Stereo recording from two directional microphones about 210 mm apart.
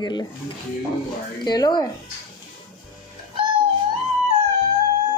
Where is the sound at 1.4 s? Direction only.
20° left (ahead or behind).